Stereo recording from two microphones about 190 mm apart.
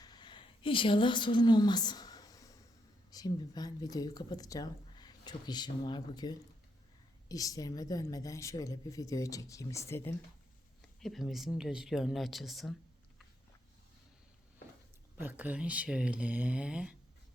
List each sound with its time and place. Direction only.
0.0 s a sound: 20° left (ahead or behind)
3.1 s speech: 20° left (ahead or behind)
11.0 s speech: centre (ahead or behind)
15.2 s speech: 10° right (ahead or behind)